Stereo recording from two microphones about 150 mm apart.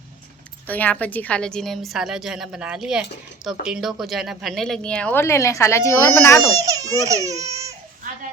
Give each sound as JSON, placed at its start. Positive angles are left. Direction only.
{"t": 0.7, "sound": "a woman's voice", "side_deg": 10}
{"t": 6.6, "sound": "speech", "side_deg": -20}